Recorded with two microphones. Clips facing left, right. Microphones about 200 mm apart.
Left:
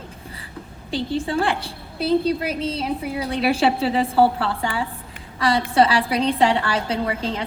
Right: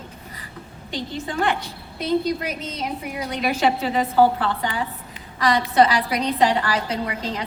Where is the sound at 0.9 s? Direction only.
30° left (ahead or behind).